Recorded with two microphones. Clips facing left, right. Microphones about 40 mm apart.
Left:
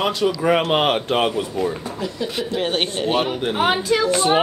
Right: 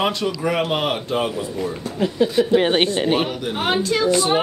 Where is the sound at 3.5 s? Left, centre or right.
Centre.